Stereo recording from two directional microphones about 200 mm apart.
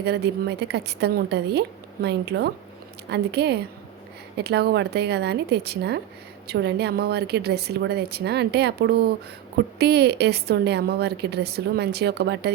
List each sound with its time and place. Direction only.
0.0 s a woman's voice: 55° right (ahead or behind)